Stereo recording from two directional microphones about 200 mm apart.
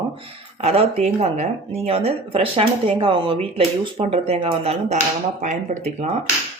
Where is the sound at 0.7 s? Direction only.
35° right (ahead or behind).